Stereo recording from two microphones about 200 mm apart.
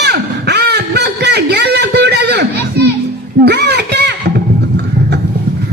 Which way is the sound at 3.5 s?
55° right (ahead or behind).